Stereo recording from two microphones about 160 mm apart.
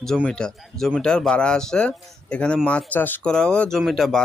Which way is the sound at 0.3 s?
5° left (ahead or behind).